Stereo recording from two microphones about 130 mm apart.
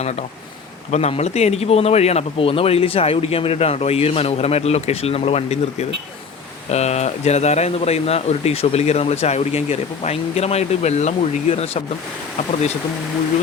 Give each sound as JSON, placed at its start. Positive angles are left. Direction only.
{"t": 0.0, "sound": "speech", "side_deg": 55}